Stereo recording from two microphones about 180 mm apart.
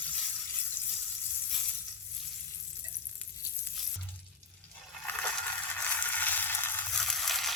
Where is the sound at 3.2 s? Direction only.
10° left (ahead or behind).